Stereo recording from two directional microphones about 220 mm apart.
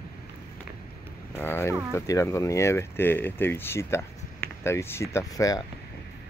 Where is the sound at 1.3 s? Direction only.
10° left (ahead or behind).